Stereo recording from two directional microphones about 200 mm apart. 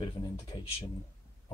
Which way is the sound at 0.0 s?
20° left (ahead or behind).